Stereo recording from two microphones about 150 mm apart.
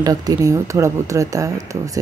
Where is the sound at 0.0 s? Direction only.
25° right (ahead or behind).